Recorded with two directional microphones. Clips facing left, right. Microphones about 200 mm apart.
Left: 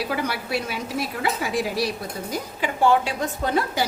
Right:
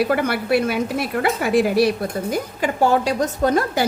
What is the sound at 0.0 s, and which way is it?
Speech, 55° right (ahead or behind).